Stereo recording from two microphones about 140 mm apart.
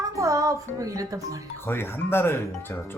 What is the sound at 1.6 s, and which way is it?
Speech, 15° left (ahead or behind).